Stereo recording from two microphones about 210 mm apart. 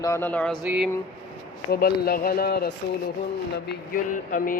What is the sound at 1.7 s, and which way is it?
Speech, 45° left (ahead or behind).